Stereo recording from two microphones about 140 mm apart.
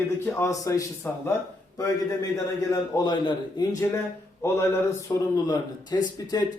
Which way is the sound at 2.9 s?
30° left (ahead or behind).